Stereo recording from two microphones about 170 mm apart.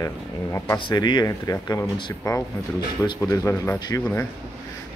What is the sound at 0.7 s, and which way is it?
Speech, 25° left (ahead or behind).